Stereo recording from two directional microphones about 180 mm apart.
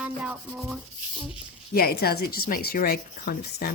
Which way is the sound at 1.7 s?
60° left (ahead or behind).